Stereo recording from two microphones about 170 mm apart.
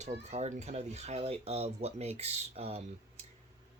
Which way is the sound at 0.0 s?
40° right (ahead or behind).